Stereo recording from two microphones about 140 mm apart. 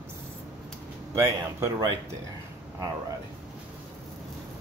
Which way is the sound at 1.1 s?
25° right (ahead or behind).